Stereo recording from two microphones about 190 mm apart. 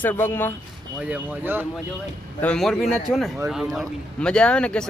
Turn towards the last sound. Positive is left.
turn(degrees=5)  # may be behind; listen again after turning